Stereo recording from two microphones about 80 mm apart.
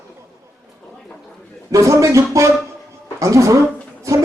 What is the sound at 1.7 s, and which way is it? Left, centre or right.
Speech, right.